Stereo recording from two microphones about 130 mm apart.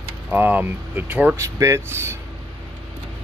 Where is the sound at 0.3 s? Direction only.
15° right (ahead or behind).